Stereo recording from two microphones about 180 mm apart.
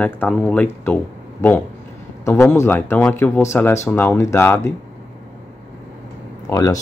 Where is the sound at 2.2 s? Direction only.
15° left (ahead or behind).